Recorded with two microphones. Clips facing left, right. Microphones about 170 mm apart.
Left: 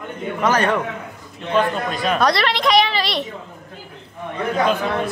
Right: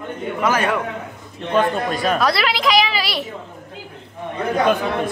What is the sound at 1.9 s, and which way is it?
Speech, 45° right (ahead or behind).